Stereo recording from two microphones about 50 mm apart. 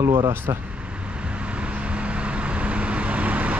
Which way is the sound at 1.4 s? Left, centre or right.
Right.